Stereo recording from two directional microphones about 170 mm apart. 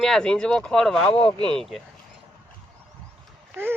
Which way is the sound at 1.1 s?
35° left (ahead or behind).